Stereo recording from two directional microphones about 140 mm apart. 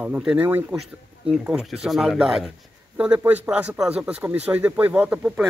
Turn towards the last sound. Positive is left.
turn(degrees=-5)  # may be behind; listen again after turning